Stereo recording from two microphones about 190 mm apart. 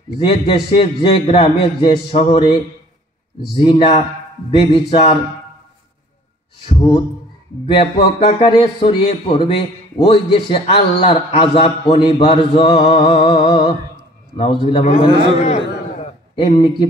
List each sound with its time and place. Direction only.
0.3 s a man's voice: 30° left (ahead or behind)
7.6 s a man's voice: 25° left (ahead or behind)
16.3 s a man's voice: 25° left (ahead or behind)